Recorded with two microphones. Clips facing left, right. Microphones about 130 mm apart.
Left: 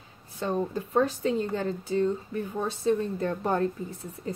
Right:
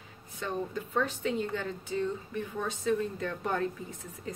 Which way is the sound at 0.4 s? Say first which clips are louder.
Left 6 dB; 35° left (ahead or behind).